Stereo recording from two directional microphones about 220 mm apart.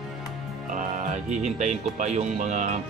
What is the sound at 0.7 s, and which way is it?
Speech, 35° right (ahead or behind).